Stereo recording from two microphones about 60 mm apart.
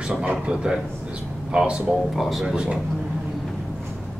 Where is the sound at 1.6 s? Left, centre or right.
Centre.